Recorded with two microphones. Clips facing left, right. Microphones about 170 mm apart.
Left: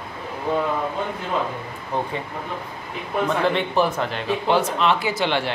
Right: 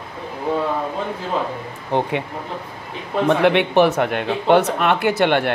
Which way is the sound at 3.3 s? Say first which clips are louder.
Right 8 dB; 70° right (ahead or behind).